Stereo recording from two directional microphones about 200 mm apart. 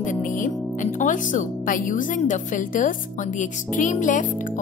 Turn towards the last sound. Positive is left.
turn(degrees=40)  # may be behind; listen again after turning